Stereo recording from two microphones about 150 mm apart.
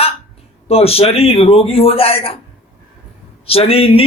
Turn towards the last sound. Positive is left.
turn(degrees=40)  # may be behind; listen again after turning